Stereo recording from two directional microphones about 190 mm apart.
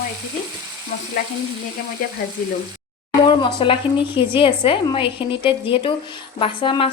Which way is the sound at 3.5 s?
25° left (ahead or behind).